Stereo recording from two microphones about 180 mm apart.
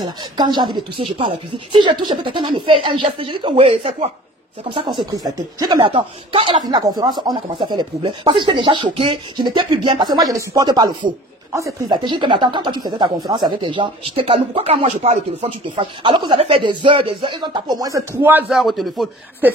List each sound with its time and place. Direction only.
0.0 s speech: 25° right (ahead or behind)
18.5 s speech: centre (ahead or behind)